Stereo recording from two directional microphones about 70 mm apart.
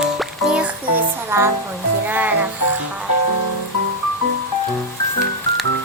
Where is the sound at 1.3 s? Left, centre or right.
Right.